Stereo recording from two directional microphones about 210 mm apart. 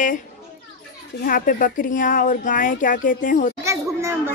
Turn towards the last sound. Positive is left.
turn(degrees=-15)  # may be behind; listen again after turning